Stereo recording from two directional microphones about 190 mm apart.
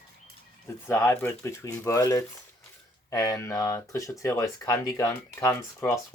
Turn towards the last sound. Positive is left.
turn(degrees=15)  # may be behind; listen again after turning